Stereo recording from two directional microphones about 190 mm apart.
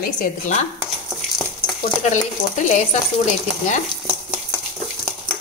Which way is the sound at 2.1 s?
40° left (ahead or behind).